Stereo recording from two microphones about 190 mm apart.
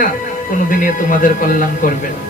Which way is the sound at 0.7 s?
45° left (ahead or behind).